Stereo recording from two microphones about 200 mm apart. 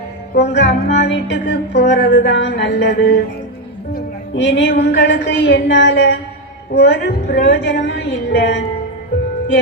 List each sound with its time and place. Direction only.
0.5 s music: 60° left (ahead or behind)